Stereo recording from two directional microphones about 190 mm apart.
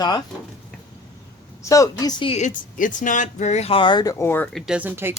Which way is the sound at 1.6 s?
15° left (ahead or behind).